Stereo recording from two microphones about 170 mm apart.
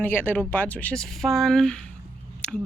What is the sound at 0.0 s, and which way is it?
Speech, 10° left (ahead or behind).